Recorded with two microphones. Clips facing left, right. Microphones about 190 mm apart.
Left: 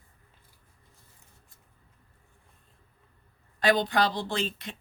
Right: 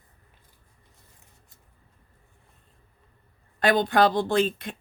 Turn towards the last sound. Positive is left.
turn(degrees=-50)  # may be behind; listen again after turning